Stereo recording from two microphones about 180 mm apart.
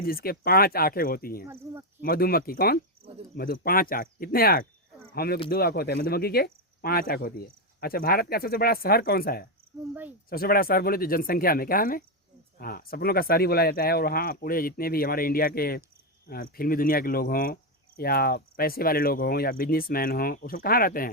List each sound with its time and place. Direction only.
0.0 s speech: 55° left (ahead or behind)